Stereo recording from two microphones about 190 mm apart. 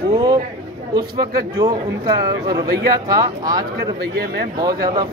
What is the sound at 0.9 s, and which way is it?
Speech, 20° right (ahead or behind).